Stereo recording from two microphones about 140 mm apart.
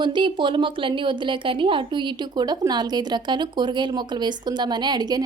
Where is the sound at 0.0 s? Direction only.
35° right (ahead or behind).